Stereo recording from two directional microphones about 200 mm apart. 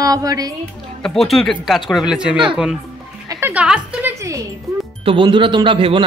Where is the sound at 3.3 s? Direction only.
10° right (ahead or behind).